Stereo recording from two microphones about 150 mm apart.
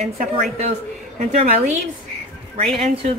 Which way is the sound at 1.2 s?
50° right (ahead or behind).